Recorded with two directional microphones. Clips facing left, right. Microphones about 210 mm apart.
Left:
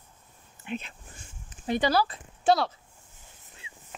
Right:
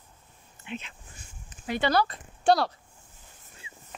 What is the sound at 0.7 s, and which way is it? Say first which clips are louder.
Speech: left 3 dB; 40° left (ahead or behind).